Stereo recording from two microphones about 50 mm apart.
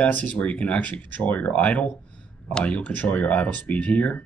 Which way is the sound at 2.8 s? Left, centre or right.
Left.